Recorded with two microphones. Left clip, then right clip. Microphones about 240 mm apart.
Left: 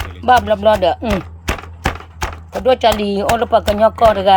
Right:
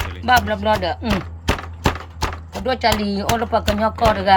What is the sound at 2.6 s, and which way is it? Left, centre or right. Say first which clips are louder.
Speech: left 6 dB; left.